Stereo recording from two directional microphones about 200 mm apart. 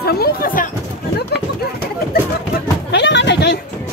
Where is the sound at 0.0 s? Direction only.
50° left (ahead or behind).